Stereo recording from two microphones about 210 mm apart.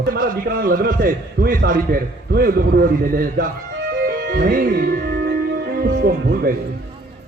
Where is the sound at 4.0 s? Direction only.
50° right (ahead or behind).